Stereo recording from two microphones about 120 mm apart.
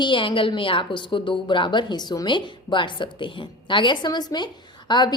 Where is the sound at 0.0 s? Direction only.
45° left (ahead or behind).